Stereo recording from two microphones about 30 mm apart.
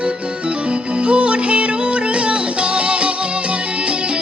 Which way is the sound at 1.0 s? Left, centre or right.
Right.